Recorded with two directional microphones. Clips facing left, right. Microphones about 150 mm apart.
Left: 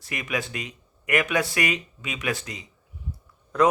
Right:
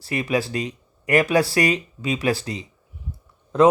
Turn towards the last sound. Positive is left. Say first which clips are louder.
# right 5 dB
turn(degrees=-25)  # may be behind; listen again after turning